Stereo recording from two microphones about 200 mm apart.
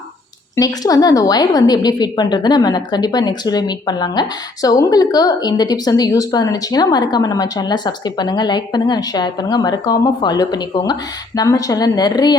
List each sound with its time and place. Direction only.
0.5 s a woman's voice: 20° left (ahead or behind)